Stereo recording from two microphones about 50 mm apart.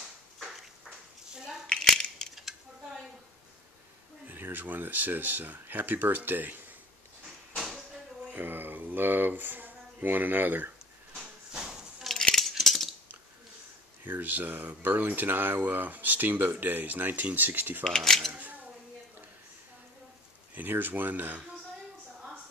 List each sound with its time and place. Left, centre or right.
1.7 s a sound: centre
4.3 s speech: right
8.4 s speech: right
11.1 s a sound: centre
12.1 s a sound: centre
14.0 s speech: right
17.8 s speech: centre
18.3 s single-lens reflex camera: right
20.5 s speech: right